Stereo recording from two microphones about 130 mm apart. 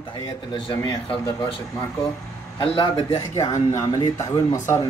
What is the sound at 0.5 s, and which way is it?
Speech, 40° left (ahead or behind).